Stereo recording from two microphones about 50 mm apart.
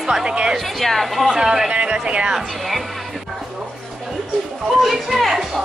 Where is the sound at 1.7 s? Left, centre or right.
Right.